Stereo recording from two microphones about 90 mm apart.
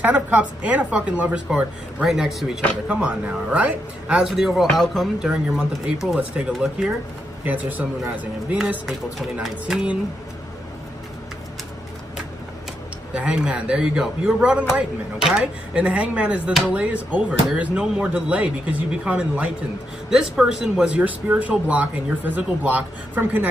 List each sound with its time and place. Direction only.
0.0 s speech: 15° right (ahead or behind)
9.4 s a sound: 5° right (ahead or behind)
13.1 s speech: 10° right (ahead or behind)